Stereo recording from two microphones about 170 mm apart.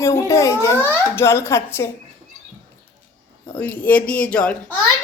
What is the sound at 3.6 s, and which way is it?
A child's voice, 10° left (ahead or behind).